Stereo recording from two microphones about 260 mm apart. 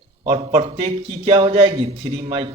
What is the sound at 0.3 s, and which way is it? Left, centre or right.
A man's voice, right.